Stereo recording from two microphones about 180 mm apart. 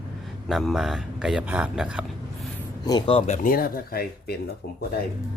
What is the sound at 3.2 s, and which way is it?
Speech, 40° left (ahead or behind).